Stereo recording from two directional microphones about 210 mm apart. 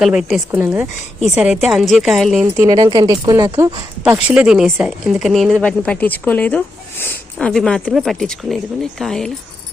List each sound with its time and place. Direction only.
0.0 s speech: centre (ahead or behind)
2.6 s speech: 15° right (ahead or behind)
4.0 s speech: 5° right (ahead or behind)